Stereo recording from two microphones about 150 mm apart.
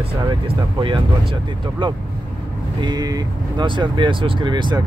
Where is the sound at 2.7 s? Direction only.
25° right (ahead or behind).